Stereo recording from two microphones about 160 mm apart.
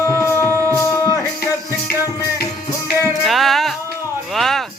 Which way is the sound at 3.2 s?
Centre (ahead or behind).